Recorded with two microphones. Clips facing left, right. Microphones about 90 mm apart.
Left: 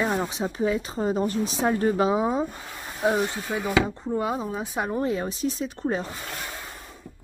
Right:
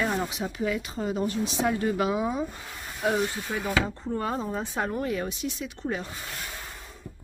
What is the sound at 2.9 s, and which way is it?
Speech, 20° left (ahead or behind).